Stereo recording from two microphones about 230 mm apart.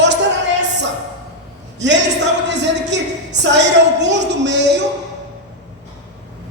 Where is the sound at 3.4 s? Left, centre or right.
Right.